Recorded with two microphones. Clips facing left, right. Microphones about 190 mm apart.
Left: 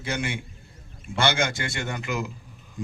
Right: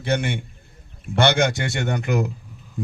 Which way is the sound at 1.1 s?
65° right (ahead or behind).